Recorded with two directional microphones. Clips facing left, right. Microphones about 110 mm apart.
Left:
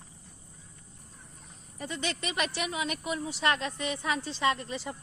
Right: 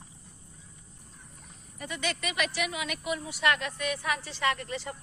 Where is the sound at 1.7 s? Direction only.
30° left (ahead or behind).